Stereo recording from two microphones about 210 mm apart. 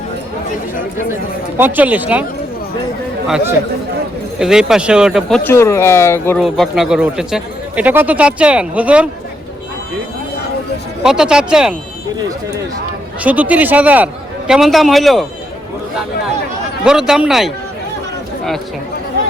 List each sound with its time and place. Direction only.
1.5 s a man's voice: 10° right (ahead or behind)
3.2 s speech: 5° right (ahead or behind)
5.4 s speech: 10° left (ahead or behind)
6.4 s speech: centre (ahead or behind)
11.0 s speech: 5° right (ahead or behind)
13.2 s a man's voice: 5° right (ahead or behind)
16.8 s speech: 5° right (ahead or behind)